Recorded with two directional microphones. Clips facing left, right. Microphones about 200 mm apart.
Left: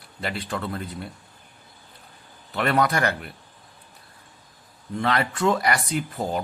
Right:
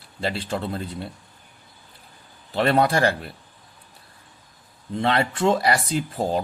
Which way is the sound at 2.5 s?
30° right (ahead or behind).